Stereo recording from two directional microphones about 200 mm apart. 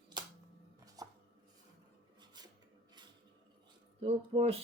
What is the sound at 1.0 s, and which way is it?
Chopping, 20° right (ahead or behind).